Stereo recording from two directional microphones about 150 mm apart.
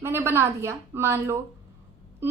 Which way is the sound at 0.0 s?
15° right (ahead or behind).